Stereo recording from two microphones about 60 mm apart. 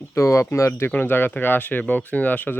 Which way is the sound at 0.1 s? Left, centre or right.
Left.